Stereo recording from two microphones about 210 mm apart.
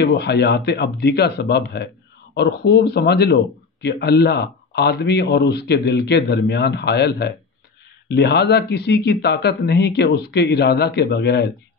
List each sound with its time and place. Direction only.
0.0 s speech: 50° left (ahead or behind)